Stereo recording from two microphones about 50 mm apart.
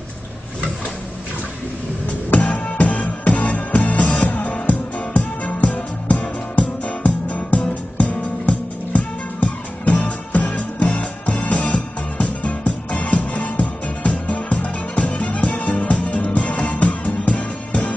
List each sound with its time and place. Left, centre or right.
2.3 s music: left